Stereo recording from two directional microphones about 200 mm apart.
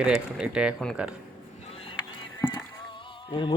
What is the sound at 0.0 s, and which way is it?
Speech, 5° right (ahead or behind).